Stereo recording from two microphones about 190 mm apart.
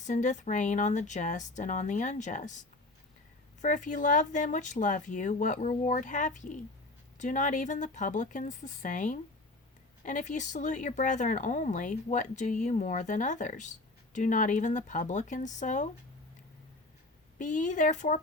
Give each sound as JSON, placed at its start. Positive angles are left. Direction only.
{"t": 0.0, "sound": "speech", "side_deg": 40}
{"t": 17.3, "sound": "speech", "side_deg": 40}